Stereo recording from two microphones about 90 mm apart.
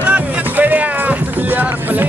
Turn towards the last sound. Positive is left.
turn(degrees=-20)  # may be behind; listen again after turning